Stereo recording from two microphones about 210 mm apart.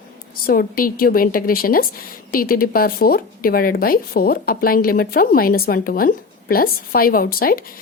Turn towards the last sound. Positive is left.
turn(degrees=45)  # may be behind; listen again after turning